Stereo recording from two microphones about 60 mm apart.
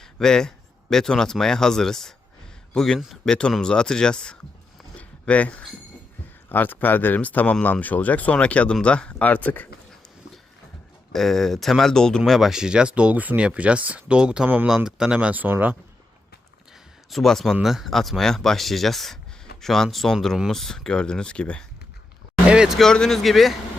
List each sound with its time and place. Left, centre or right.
0.0 s a man's voice: centre
4.9 s a sound: left
6.5 s speech: left
11.1 s speech: centre
12.2 s speech: centre; by 14.7 s right
14.8 s speech: centre
15.3 s speech: right
17.1 s speech: centre
22.4 s vehicle: centre
22.8 s speech: centre